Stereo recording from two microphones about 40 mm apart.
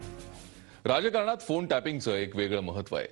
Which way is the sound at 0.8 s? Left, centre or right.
Centre.